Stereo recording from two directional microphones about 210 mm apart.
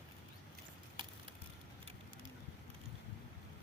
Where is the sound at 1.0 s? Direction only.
20° right (ahead or behind).